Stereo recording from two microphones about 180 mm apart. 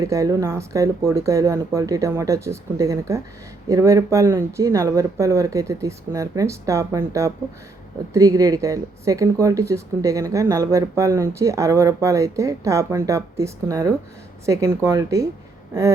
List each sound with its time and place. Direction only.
0.0 s speech: 20° right (ahead or behind)